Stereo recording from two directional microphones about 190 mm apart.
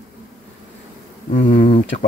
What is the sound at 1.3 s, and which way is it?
Speech, 40° left (ahead or behind).